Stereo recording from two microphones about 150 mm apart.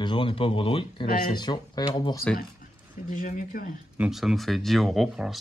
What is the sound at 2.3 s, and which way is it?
Speech, 70° left (ahead or behind).